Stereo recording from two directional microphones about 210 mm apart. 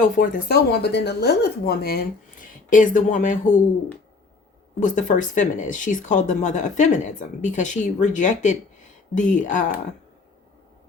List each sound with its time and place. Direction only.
0.0 s speech: 40° left (ahead or behind)
4.8 s speech: 35° left (ahead or behind)